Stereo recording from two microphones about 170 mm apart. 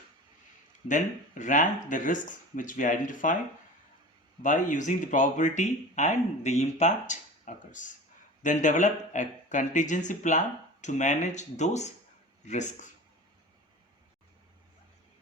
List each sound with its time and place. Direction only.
0.9 s speech: 50° left (ahead or behind)
4.4 s speech: 45° left (ahead or behind)